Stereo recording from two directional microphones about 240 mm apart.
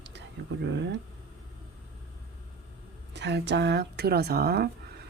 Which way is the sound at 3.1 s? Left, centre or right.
Right.